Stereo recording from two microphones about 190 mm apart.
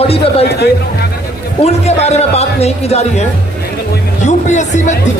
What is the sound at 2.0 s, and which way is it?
A man's voice, 35° left (ahead or behind).